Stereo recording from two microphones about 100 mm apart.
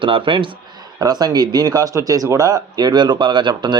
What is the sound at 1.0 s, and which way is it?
Speech, 40° right (ahead or behind).